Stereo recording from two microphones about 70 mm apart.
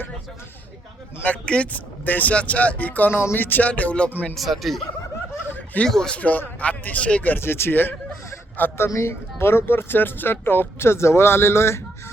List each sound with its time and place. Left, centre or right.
1.2 s speech: centre
4.4 s speech: centre
5.8 s speech: centre
6.1 s speech: left
8.9 s speech: left